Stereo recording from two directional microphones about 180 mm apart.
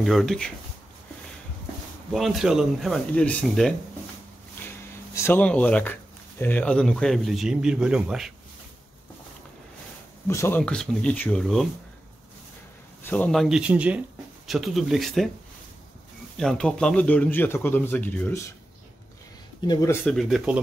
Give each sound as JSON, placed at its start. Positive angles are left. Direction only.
{"t": 0.0, "sound": "a man's voice", "side_deg": 0}
{"t": 2.1, "sound": "a man's voice", "side_deg": 0}
{"t": 5.1, "sound": "a man's voice", "side_deg": 15}
{"t": 10.2, "sound": "a man's voice", "side_deg": 15}
{"t": 13.0, "sound": "a man's voice", "side_deg": 10}
{"t": 16.3, "sound": "a man's voice", "side_deg": 5}
{"t": 19.6, "sound": "speech", "side_deg": 20}
{"t": 20.1, "sound": "a man's voice", "side_deg": 0}